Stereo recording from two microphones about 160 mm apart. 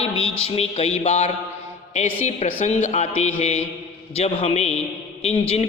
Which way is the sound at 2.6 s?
45° left (ahead or behind).